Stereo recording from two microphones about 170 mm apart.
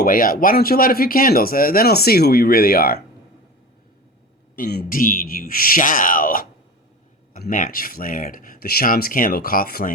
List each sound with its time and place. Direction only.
0.0 s speech: 55° left (ahead or behind)
4.5 s speech: 60° left (ahead or behind)